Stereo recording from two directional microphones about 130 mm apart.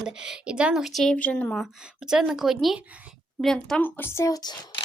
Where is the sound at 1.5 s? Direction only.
Centre (ahead or behind).